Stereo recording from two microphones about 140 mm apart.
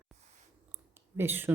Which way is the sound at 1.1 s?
15° right (ahead or behind).